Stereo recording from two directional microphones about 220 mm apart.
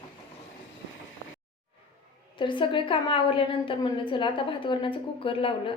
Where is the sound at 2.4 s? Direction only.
20° left (ahead or behind).